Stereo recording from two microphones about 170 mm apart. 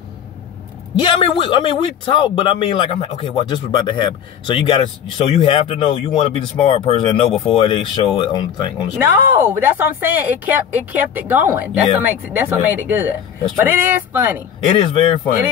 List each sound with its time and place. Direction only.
0.9 s a man's voice: 30° left (ahead or behind)
8.9 s speech: 15° right (ahead or behind)